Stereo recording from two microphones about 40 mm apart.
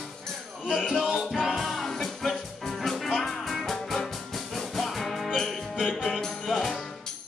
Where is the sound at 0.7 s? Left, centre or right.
Centre.